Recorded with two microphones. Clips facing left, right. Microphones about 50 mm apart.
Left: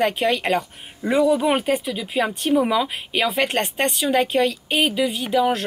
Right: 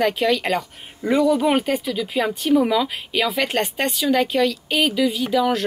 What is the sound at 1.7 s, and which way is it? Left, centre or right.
Speech, centre.